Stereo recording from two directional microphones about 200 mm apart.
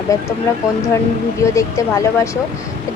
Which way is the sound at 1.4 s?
15° left (ahead or behind).